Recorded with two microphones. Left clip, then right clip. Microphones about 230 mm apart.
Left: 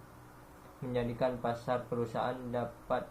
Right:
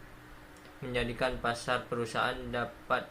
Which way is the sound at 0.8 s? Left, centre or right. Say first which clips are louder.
Right 1 dB; right.